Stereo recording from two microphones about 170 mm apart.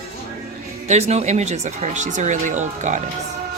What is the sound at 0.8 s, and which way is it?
Speech, 40° right (ahead or behind).